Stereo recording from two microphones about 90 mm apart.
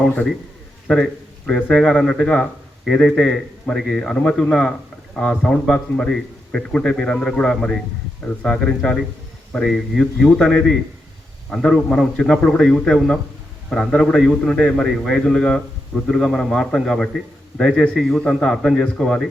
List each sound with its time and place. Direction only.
0.0 s a man's voice: 15° left (ahead or behind)
1.5 s speech: 10° left (ahead or behind)